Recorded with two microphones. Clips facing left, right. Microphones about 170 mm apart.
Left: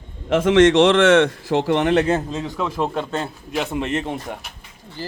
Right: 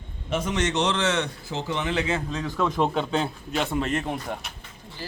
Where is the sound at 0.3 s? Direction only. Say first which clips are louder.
Left 12 dB; 90° left; by 2.1 s 60° left (ahead or behind).